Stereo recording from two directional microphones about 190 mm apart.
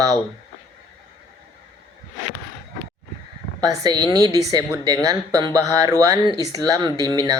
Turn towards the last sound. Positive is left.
turn(degrees=-20)  # may be behind; listen again after turning